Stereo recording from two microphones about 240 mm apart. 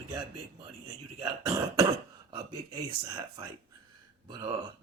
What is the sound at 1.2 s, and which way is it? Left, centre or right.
Speech, centre.